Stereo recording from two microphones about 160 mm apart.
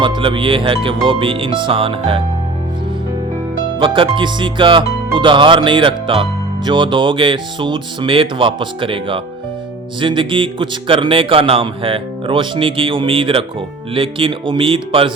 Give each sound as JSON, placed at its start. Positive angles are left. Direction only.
{"t": 0.0, "sound": "speech", "side_deg": -30}
{"t": 3.8, "sound": "speech", "side_deg": -30}